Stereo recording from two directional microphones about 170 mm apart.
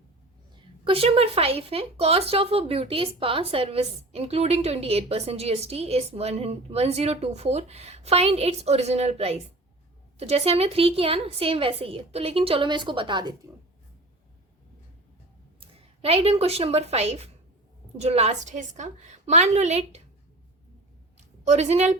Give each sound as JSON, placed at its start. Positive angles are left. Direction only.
{"t": 0.5, "sound": "a woman's voice", "side_deg": -35}
{"t": 15.6, "sound": "a woman's voice", "side_deg": -35}
{"t": 21.2, "sound": "a sound", "side_deg": -40}